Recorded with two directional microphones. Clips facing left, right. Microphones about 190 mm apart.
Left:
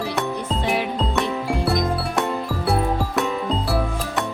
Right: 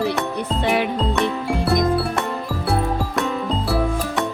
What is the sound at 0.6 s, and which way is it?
Music, 60° right (ahead or behind).